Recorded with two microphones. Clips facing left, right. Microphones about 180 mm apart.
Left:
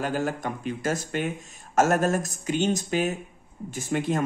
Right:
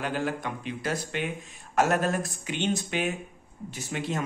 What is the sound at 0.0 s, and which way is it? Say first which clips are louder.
Speech: left 2 dB; 45° left (ahead or behind).